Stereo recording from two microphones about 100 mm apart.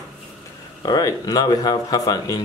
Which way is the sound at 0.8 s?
40° left (ahead or behind).